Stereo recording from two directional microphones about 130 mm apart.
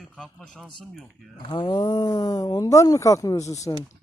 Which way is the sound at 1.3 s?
35° left (ahead or behind).